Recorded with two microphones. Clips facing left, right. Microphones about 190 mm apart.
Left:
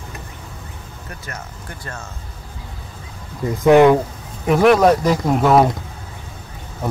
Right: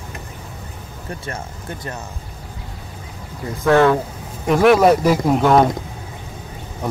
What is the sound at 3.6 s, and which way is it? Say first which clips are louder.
Speech: left 3 dB; 15° left (ahead or behind).